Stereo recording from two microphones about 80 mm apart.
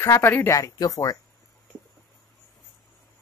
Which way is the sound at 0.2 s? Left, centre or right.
Left.